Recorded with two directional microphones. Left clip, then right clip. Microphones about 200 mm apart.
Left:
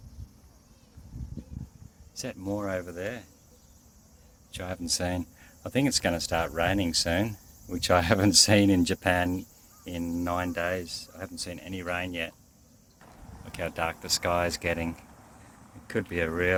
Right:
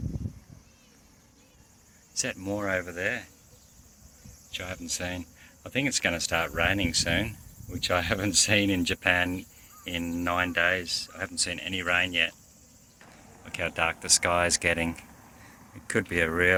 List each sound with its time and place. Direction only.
2.1 s speech: 5° left (ahead or behind)
4.5 s speech: 35° left (ahead or behind)
7.7 s speech: 45° left (ahead or behind); by 12.3 s 10° left (ahead or behind)
13.4 s speech: 10° left (ahead or behind); by 16.6 s 5° right (ahead or behind)